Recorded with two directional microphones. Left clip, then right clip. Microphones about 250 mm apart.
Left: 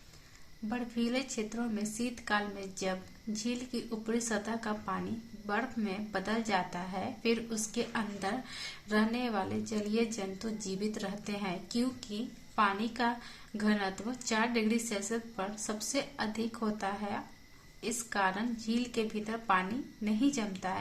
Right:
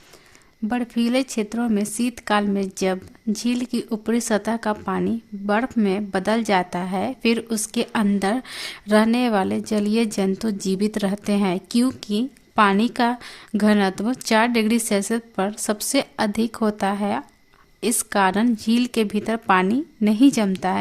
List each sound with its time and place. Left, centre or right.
0.7 s speech: right